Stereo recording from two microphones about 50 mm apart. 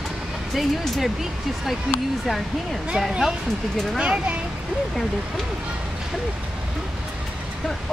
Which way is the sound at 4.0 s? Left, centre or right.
Right.